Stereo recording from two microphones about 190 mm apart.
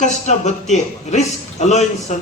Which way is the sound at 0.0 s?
40° left (ahead or behind).